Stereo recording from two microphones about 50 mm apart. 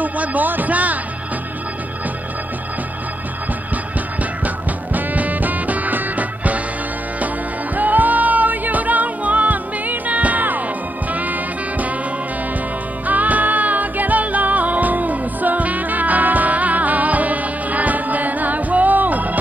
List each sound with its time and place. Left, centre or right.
0.0 s speech: right
4.9 s music: right
7.7 s music: right
13.0 s music: right